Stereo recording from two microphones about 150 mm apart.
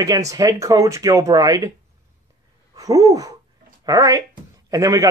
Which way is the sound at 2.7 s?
25° right (ahead or behind).